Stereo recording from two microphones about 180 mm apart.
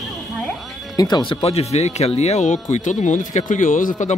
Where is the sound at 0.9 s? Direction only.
20° left (ahead or behind).